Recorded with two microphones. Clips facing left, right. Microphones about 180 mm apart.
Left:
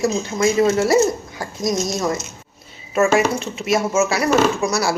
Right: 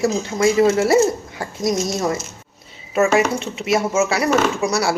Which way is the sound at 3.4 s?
25° right (ahead or behind).